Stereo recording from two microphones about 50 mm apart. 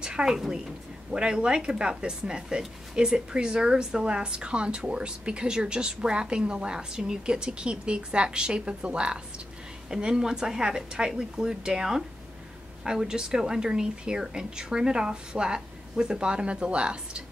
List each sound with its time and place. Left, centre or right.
0.0 s a woman's voice: centre